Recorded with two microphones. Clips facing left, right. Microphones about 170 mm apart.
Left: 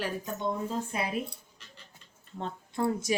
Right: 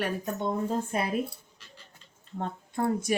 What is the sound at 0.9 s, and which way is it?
Speech, 50° right (ahead or behind).